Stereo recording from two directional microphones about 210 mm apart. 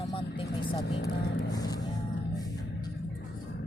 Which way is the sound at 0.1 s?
25° left (ahead or behind).